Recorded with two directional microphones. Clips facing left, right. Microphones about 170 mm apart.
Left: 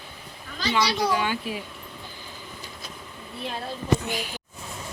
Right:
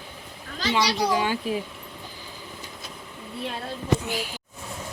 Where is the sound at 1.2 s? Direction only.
40° right (ahead or behind).